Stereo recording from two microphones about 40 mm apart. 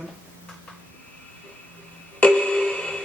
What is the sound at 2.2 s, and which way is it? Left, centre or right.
Music, left.